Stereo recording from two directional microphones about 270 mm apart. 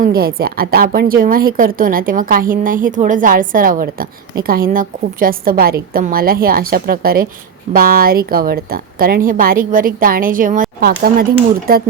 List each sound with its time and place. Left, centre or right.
0.0 s a woman's voice: right